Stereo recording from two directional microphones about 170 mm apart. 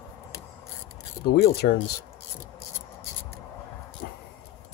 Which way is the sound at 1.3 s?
65° left (ahead or behind).